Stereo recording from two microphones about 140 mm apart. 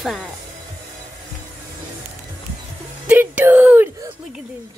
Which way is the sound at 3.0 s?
10° right (ahead or behind).